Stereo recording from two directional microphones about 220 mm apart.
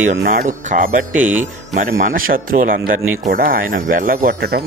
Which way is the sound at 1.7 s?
40° right (ahead or behind).